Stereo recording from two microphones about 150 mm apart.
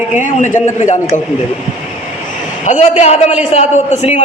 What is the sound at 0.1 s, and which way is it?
A man's voice, 55° left (ahead or behind).